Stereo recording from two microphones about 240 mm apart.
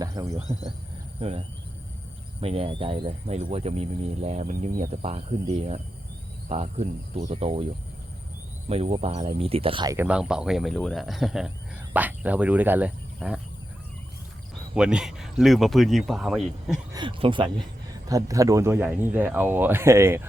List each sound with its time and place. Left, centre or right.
0.0 s speech: centre
1.2 s speech: right
8.7 s speech: right; by 13.4 s centre
14.8 s speech: centre
16.9 s speech: centre